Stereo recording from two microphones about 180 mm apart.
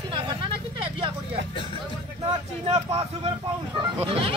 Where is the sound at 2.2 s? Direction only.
35° right (ahead or behind).